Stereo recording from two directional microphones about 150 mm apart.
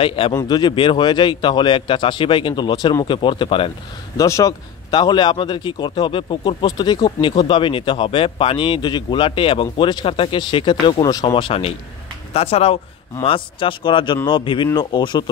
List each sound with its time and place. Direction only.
0.0 s speech: 35° left (ahead or behind)
0.3 s speech: 25° left (ahead or behind)
4.2 s speech: 20° left (ahead or behind)